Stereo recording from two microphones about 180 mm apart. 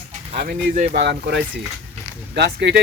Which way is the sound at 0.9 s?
65° right (ahead or behind).